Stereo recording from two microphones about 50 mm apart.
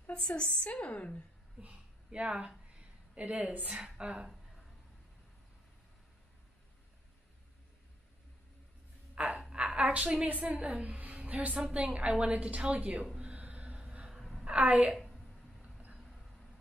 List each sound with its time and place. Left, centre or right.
0.1 s a woman's voice: centre
1.6 s a sound: right
3.6 s a woman's voice: centre
9.1 s a sound: right
10.2 s a woman's voice: right
13.2 s gasp: right
14.4 s a woman's voice: right